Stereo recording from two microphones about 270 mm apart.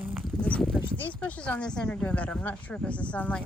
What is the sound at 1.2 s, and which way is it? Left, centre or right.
Speech, centre.